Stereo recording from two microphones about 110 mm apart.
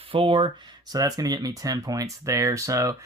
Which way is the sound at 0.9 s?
35° right (ahead or behind).